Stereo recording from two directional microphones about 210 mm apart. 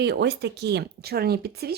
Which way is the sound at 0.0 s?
50° right (ahead or behind).